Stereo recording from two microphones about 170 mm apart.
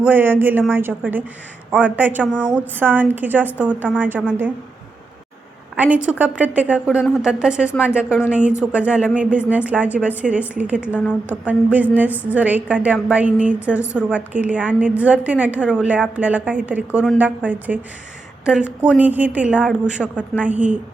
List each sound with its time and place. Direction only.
0.0 s a woman's voice: 10° right (ahead or behind)
5.7 s a woman's voice: 10° right (ahead or behind)